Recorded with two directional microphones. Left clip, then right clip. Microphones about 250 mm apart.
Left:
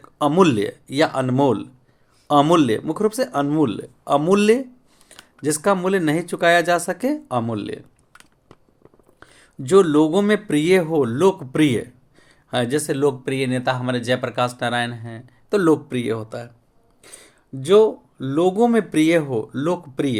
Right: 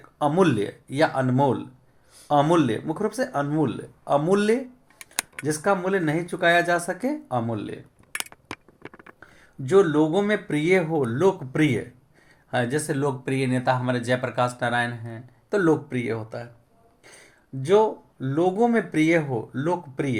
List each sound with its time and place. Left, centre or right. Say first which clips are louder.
0.2 s speech: left 4 dB; left
9.2 s speech: left 6 dB; left